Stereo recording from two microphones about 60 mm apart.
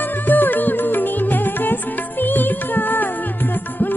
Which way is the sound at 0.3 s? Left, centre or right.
Left.